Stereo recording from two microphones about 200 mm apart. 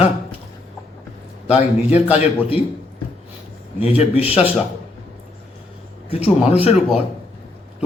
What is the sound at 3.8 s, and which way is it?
Speech, 30° left (ahead or behind).